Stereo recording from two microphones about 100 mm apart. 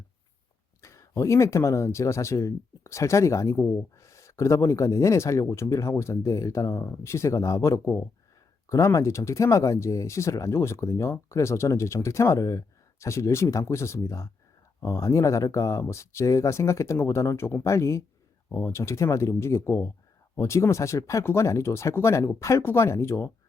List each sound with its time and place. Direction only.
0.8 s speech: 30° left (ahead or behind)